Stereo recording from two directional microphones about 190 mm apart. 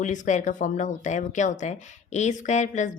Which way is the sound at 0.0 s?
40° left (ahead or behind).